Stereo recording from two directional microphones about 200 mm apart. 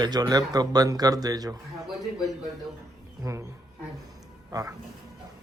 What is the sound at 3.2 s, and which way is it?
Speech, 15° right (ahead or behind).